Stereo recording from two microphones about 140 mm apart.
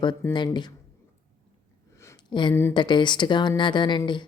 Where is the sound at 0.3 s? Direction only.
35° left (ahead or behind).